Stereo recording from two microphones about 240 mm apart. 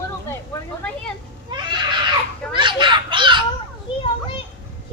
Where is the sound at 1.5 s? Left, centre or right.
Centre.